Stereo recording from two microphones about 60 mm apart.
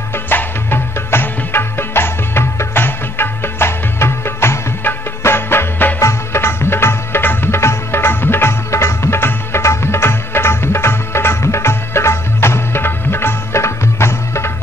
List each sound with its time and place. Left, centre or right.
0.1 s music: left